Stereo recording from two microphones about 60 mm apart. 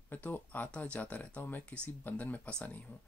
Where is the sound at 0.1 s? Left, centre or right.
Left.